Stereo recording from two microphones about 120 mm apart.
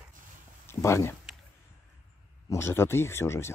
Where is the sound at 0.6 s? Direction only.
25° left (ahead or behind).